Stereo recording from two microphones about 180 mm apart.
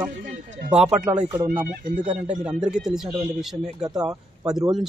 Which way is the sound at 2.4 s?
5° right (ahead or behind).